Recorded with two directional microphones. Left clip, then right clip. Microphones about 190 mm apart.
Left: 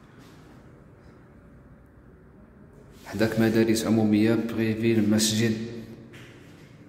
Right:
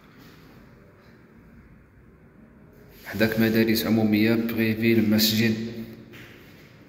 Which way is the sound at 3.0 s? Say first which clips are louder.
Right 1 dB; 15° left (ahead or behind).